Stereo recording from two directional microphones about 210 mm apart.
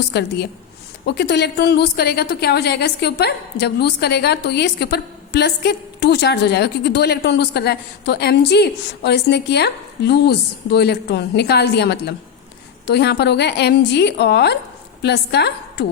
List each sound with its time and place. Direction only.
0.1 s a woman's voice: 50° left (ahead or behind)